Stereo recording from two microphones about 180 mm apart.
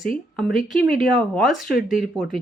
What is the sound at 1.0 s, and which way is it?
Speech, centre (ahead or behind).